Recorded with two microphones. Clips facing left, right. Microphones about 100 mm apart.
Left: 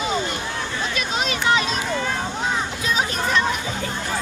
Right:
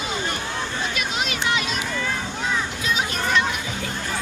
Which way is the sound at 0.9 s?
35° left (ahead or behind).